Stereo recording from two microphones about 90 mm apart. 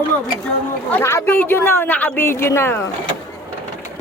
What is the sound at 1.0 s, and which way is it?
Speech, 30° left (ahead or behind).